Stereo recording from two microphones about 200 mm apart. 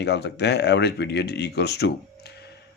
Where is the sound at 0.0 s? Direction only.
60° left (ahead or behind).